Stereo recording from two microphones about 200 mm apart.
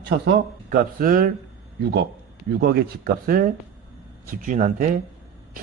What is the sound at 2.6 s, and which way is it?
A man's voice, 50° right (ahead or behind).